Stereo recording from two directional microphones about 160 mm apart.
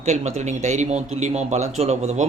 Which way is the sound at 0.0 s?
45° right (ahead or behind).